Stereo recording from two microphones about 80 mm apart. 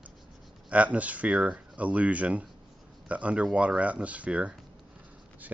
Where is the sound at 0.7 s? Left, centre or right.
Centre.